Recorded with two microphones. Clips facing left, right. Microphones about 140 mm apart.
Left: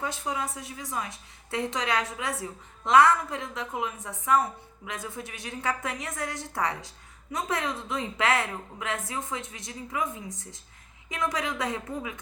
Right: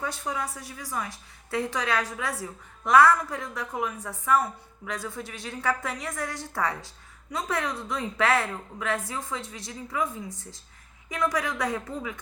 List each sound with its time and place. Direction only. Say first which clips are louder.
0.0 s a woman's voice: even; 20° left (ahead or behind)